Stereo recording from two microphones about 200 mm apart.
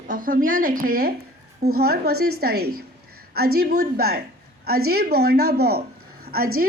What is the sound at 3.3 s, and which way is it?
A woman's voice, 50° right (ahead or behind).